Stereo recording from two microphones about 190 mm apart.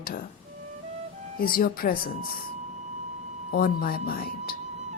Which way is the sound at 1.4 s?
50° left (ahead or behind).